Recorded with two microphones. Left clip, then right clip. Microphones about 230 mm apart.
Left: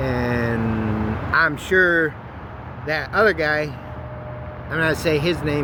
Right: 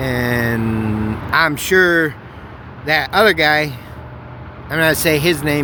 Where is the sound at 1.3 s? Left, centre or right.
Right.